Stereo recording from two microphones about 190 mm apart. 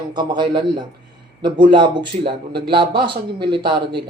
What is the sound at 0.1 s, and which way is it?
A man's voice, 25° right (ahead or behind).